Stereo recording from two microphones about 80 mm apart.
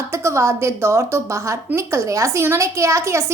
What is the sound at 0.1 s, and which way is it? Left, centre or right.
A woman's voice, right.